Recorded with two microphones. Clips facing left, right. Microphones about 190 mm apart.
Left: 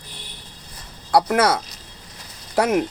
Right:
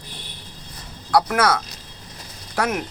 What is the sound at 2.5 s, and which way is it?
Speech, 15° left (ahead or behind).